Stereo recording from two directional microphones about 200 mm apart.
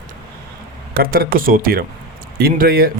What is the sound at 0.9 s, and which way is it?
Speech, 50° right (ahead or behind).